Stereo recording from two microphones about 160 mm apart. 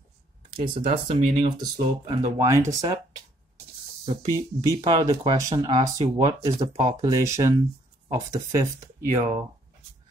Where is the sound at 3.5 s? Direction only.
40° right (ahead or behind).